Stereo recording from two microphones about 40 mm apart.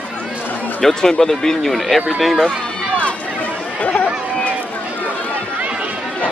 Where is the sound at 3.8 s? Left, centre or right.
Left.